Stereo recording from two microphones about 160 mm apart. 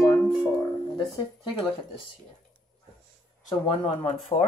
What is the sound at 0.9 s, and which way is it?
Speech, 30° left (ahead or behind).